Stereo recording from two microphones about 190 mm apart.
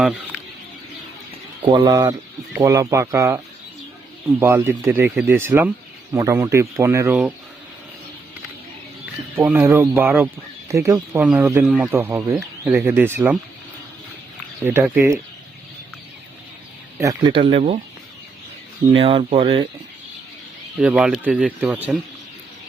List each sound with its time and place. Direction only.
1.6 s speech: 25° right (ahead or behind)
5.0 s speech: centre (ahead or behind)
5.3 s speech: 10° right (ahead or behind)
9.4 s speech: 10° right (ahead or behind)
11.9 s speech: 15° right (ahead or behind)
14.6 s speech: 10° right (ahead or behind)
17.0 s speech: 20° right (ahead or behind)
18.9 s speech: 30° right (ahead or behind)
20.8 s speech: 5° right (ahead or behind)